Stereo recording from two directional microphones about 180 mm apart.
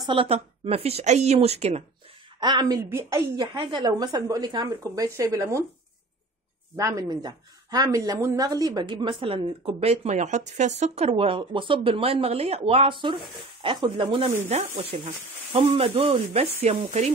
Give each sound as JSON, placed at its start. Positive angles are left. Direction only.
{"t": 0.0, "sound": "speech", "side_deg": -30}
{"t": 2.4, "sound": "speech", "side_deg": -20}
{"t": 6.8, "sound": "speech", "side_deg": -20}